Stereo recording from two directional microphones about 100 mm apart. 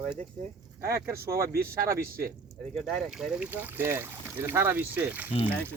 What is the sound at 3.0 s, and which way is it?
Speech, 5° right (ahead or behind).